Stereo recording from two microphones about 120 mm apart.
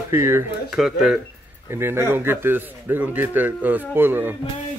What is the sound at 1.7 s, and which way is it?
Speech, 20° right (ahead or behind).